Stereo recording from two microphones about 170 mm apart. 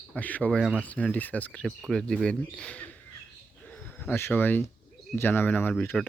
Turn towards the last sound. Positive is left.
turn(degrees=10)  # may be behind; listen again after turning